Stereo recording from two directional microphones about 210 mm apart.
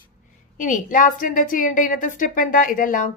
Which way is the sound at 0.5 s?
40° left (ahead or behind).